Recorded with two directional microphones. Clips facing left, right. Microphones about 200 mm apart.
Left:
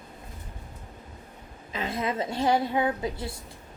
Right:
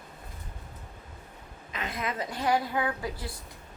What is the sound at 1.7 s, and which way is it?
A woman's voice, 25° left (ahead or behind).